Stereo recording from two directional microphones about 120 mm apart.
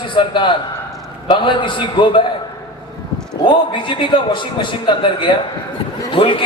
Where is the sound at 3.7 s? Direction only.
45° left (ahead or behind).